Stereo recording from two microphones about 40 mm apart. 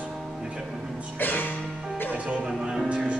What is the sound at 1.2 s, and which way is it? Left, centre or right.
Music, left.